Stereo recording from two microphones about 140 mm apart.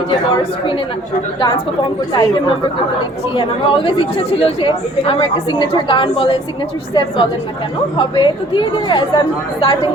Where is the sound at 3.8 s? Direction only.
40° left (ahead or behind).